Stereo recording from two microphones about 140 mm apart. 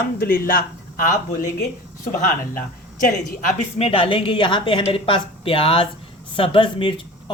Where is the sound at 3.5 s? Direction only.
55° left (ahead or behind).